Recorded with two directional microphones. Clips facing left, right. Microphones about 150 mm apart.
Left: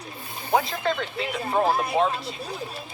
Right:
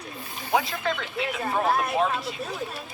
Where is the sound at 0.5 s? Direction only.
30° left (ahead or behind).